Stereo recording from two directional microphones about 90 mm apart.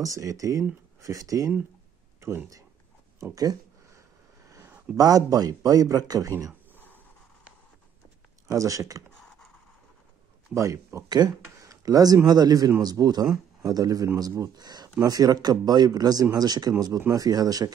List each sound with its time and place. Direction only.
0.0 s speech: 40° right (ahead or behind)
3.3 s a sound: 40° right (ahead or behind)
4.9 s speech: 40° right (ahead or behind)
8.5 s speech: 40° right (ahead or behind)
10.5 s speech: 35° right (ahead or behind)
11.1 s speech: 50° right (ahead or behind)
11.6 s a sound: 40° right (ahead or behind)
12.3 s speech: 50° right (ahead or behind)